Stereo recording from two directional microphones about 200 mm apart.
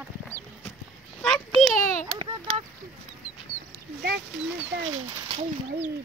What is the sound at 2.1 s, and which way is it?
Speech, 30° right (ahead or behind).